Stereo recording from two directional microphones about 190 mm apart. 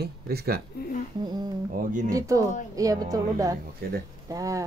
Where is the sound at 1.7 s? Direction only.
45° right (ahead or behind).